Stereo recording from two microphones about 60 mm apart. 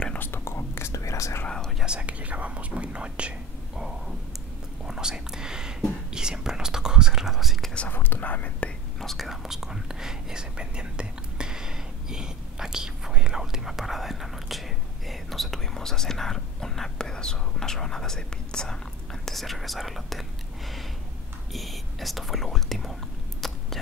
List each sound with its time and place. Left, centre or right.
0.2 s whispering: left
1.8 s whispering: centre
7.9 s whispering: left
9.0 s whispering: centre
21.5 s whispering: centre
23.4 s a sound: centre